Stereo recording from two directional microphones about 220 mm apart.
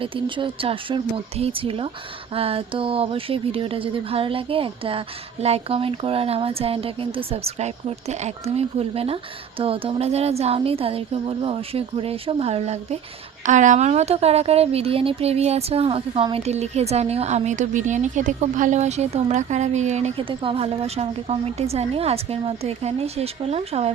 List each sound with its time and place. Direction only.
0.0 s speech: 20° right (ahead or behind)